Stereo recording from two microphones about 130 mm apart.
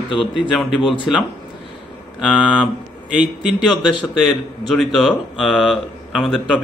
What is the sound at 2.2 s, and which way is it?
Speech, 5° right (ahead or behind).